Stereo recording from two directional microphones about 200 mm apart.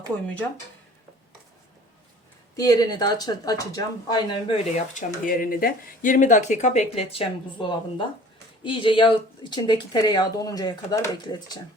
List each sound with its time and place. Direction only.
2.6 s speech: 20° left (ahead or behind)